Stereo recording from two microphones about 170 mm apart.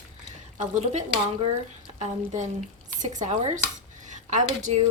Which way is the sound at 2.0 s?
45° right (ahead or behind).